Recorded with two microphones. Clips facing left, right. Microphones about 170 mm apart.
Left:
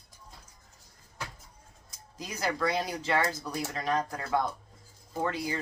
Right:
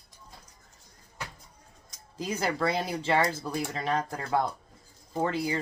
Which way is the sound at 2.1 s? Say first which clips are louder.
Right 3 dB; 30° right (ahead or behind).